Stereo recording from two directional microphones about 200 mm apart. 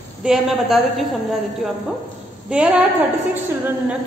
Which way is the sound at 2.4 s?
5° right (ahead or behind).